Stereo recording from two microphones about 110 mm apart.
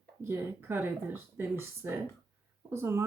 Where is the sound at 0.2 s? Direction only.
25° right (ahead or behind).